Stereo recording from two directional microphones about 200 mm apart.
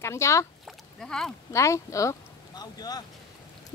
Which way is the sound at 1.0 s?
5° left (ahead or behind).